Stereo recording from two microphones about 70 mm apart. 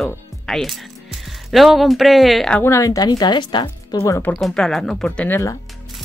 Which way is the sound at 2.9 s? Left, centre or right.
Left.